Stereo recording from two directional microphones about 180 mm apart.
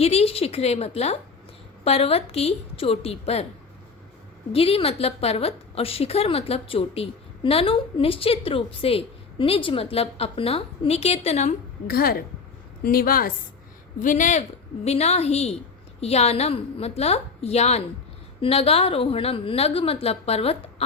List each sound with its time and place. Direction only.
0.0 s a woman's voice: 35° left (ahead or behind)
4.5 s a woman's voice: 30° left (ahead or behind)
11.9 s a woman's voice: 55° left (ahead or behind); by 20.8 s 35° left (ahead or behind)